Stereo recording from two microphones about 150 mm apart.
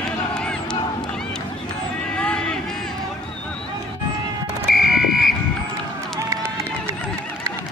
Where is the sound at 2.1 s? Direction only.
5° left (ahead or behind).